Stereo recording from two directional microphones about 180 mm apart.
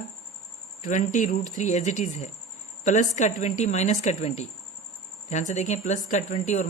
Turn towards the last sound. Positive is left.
turn(degrees=40)  # may be behind; listen again after turning